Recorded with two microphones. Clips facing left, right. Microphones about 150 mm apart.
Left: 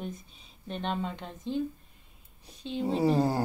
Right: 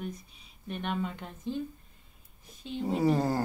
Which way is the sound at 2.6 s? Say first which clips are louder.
Left 1 dB; 25° left (ahead or behind).